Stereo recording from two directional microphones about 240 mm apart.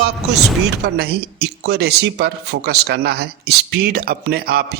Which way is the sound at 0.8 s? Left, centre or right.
Right.